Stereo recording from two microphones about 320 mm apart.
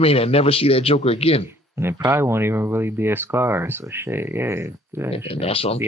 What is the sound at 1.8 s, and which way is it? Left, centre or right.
Speech, centre.